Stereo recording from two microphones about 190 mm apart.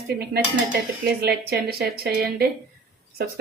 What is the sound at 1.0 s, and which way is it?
A woman's voice, 55° right (ahead or behind).